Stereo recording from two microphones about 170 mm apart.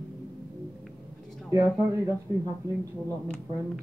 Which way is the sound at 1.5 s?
15° right (ahead or behind).